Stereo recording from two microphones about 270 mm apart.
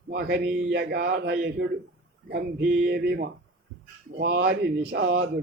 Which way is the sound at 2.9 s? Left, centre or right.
Right.